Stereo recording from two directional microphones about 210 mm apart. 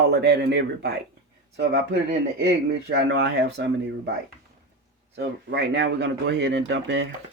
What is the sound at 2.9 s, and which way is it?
Speech, 55° right (ahead or behind).